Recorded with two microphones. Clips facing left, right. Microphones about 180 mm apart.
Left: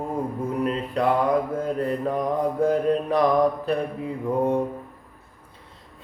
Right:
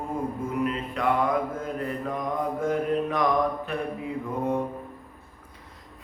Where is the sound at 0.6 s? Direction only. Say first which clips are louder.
Left 4 dB; 35° left (ahead or behind).